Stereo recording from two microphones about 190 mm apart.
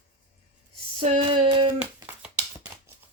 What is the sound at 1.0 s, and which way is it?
Speech, 30° right (ahead or behind).